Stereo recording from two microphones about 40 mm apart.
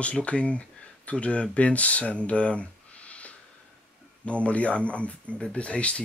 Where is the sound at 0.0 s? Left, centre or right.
Left.